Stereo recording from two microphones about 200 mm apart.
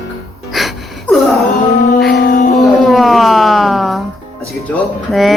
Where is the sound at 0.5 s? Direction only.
Centre (ahead or behind).